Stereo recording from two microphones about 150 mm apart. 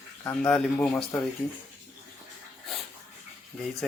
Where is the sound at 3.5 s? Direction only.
5° left (ahead or behind).